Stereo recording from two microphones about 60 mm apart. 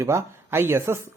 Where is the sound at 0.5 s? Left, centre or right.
Right.